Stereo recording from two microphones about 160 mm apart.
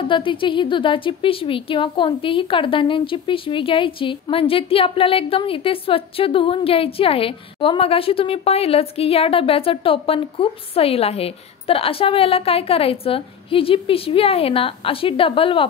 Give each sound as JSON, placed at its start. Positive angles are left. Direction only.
{"t": 0.1, "sound": "a woman's voice", "side_deg": 30}